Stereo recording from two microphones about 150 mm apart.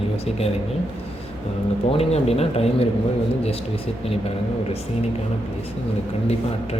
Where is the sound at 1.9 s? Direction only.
40° left (ahead or behind).